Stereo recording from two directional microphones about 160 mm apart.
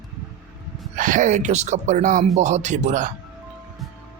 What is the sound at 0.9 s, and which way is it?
Speech, 55° right (ahead or behind).